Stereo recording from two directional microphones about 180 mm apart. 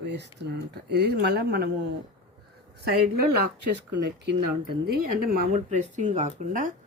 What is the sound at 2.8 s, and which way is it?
Speech, 60° right (ahead or behind).